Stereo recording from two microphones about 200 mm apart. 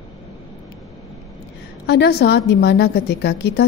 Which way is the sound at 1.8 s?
55° left (ahead or behind).